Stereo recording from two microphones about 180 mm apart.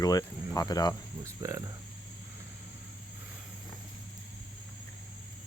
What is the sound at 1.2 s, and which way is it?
Speech, 20° right (ahead or behind).